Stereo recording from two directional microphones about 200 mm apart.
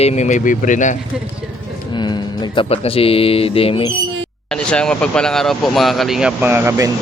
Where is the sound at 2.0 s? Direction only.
20° left (ahead or behind).